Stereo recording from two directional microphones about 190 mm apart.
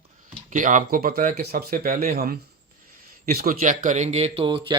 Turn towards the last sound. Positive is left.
turn(degrees=-25)  # may be behind; listen again after turning